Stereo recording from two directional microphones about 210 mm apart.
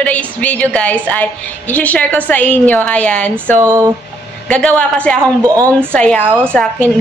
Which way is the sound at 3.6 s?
15° right (ahead or behind).